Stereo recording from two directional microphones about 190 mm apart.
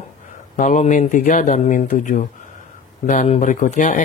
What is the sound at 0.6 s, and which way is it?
Speech, 40° left (ahead or behind).